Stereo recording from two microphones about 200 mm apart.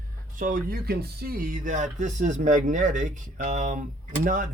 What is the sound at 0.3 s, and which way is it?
Speech, 40° right (ahead or behind).